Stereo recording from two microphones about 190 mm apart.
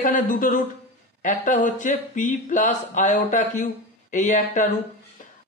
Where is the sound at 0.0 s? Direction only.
45° left (ahead or behind).